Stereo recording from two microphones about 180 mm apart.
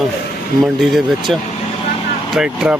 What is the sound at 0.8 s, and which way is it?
Speech, centre (ahead or behind).